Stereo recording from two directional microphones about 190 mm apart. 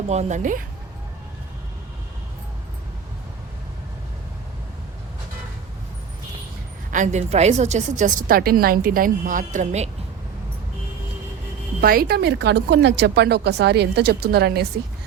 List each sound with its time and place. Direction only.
0.1 s a woman's voice: 35° right (ahead or behind)
6.9 s a woman's voice: 40° right (ahead or behind)
11.8 s speech: 50° right (ahead or behind)